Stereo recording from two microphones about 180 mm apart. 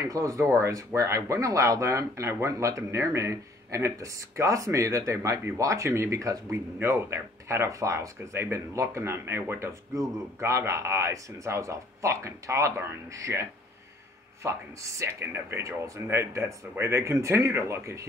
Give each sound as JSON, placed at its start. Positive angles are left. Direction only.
{"t": 0.0, "sound": "speech", "side_deg": -20}